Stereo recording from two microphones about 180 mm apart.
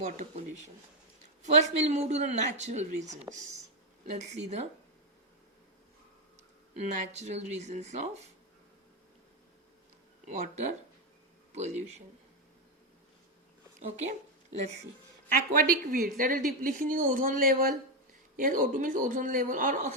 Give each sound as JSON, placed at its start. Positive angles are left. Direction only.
{"t": 0.2, "sound": "speech", "side_deg": -40}
{"t": 3.3, "sound": "speech", "side_deg": -15}
{"t": 4.0, "sound": "speech", "side_deg": -40}
{"t": 6.7, "sound": "speech", "side_deg": -40}
{"t": 10.2, "sound": "speech", "side_deg": -40}
{"t": 15.3, "sound": "a woman's voice", "side_deg": -55}